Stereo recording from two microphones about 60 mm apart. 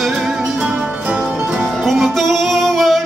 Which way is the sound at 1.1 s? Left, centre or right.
Centre.